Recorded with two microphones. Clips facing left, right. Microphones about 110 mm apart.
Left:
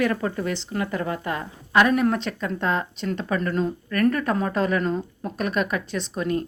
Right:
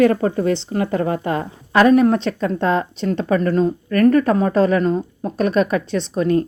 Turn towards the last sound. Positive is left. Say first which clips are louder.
# right 8 dB
turn(degrees=-40)  # may be behind; listen again after turning